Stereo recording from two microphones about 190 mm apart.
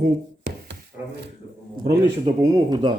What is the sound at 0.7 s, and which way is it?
Rub, 60° right (ahead or behind).